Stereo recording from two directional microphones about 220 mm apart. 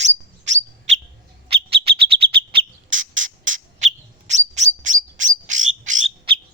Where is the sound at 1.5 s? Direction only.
25° right (ahead or behind).